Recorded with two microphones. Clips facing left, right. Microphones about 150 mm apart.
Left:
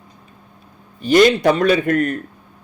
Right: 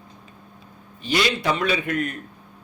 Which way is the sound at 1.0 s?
50° left (ahead or behind).